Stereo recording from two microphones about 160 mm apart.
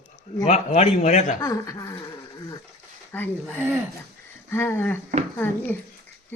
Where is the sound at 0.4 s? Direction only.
40° left (ahead or behind).